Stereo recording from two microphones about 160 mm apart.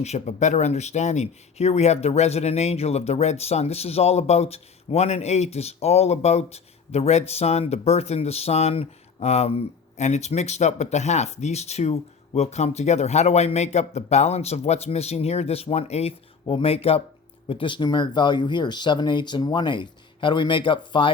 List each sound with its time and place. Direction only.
0.0 s speech: 45° left (ahead or behind)